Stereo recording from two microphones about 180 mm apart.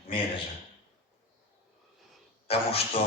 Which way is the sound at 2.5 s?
35° left (ahead or behind).